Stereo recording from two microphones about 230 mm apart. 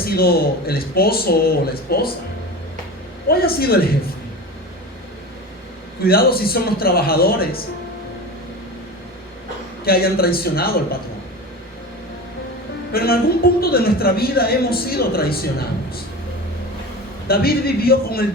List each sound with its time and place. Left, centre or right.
0.0 s a man's voice: left
3.2 s a man's voice: left
6.0 s a man's voice: left
9.8 s a man's voice: left
12.9 s a man's voice: left
17.2 s a man's voice: left